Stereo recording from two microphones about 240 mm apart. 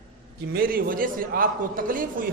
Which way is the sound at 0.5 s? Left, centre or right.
Right.